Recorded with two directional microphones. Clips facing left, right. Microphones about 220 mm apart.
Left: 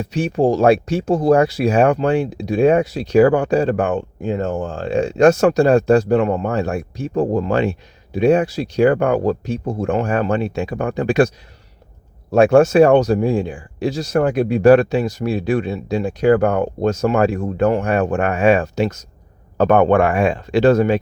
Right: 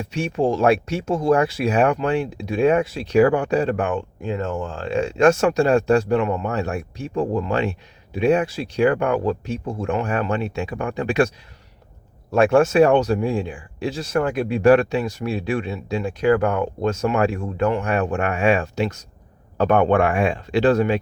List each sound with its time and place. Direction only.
0.1 s speech: 35° left (ahead or behind)
12.3 s speech: 40° left (ahead or behind)